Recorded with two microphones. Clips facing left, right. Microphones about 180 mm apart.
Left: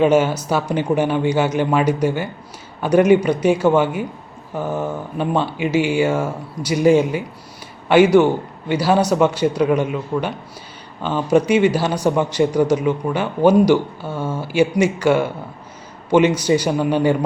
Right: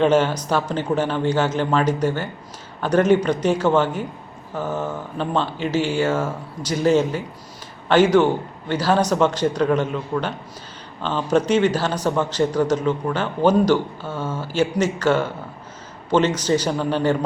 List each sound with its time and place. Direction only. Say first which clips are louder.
0.0 s a man's voice: left 2 dB; 10° left (ahead or behind)